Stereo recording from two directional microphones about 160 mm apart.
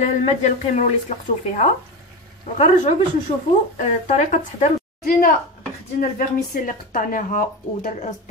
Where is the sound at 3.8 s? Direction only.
45° left (ahead or behind).